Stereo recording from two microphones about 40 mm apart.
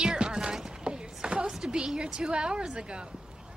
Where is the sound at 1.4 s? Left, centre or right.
Centre.